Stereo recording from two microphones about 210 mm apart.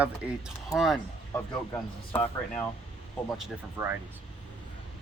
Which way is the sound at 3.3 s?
5° right (ahead or behind).